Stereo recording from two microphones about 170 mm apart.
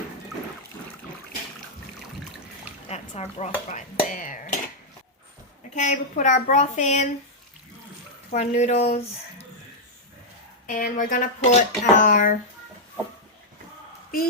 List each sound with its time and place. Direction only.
2.9 s speech: 40° left (ahead or behind)
5.7 s speech: 45° left (ahead or behind)
8.3 s speech: 40° left (ahead or behind)
10.7 s speech: 50° left (ahead or behind)